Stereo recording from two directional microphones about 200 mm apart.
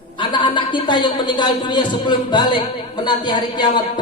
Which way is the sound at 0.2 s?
25° left (ahead or behind).